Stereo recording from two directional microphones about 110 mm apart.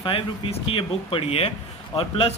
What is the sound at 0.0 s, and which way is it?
Speech, 55° left (ahead or behind).